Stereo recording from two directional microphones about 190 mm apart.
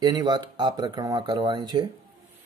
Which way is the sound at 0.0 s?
20° right (ahead or behind).